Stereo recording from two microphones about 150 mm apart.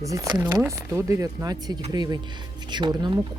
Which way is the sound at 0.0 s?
25° right (ahead or behind).